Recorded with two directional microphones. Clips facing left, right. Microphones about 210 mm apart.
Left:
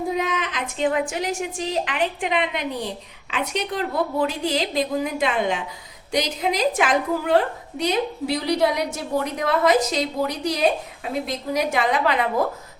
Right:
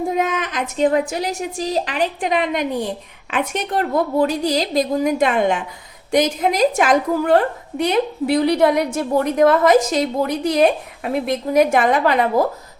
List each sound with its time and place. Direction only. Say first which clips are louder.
0.2 s a woman's voice: right 4 dB; 45° right (ahead or behind)